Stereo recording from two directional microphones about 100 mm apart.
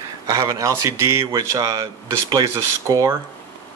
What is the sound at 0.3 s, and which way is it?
Speech, 35° right (ahead or behind).